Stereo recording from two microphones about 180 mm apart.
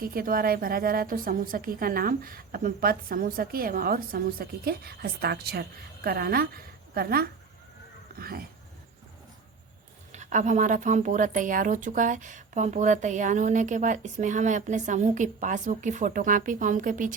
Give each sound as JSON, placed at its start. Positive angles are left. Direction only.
{"t": 0.0, "sound": "a woman's voice", "side_deg": -55}
{"t": 10.1, "sound": "speech", "side_deg": -40}